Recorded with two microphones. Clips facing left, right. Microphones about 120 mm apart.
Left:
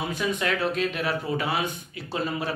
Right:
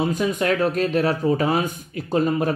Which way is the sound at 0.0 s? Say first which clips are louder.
Right 6 dB; 40° right (ahead or behind).